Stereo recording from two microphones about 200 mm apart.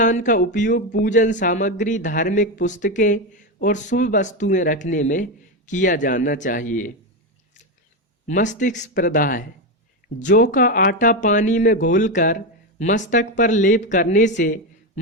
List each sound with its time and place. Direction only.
0.0 s speech: 40° left (ahead or behind)
8.3 s speech: 40° left (ahead or behind)